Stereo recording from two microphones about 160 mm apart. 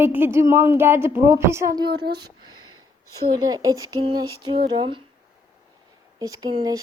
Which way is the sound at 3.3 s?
25° right (ahead or behind).